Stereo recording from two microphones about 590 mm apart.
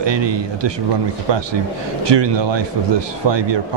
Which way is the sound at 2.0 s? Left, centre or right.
Right.